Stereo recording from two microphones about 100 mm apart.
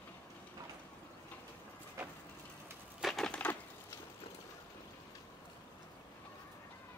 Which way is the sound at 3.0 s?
Centre (ahead or behind).